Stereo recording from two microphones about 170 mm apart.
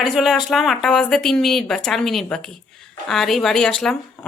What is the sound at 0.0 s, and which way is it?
Speech, centre (ahead or behind).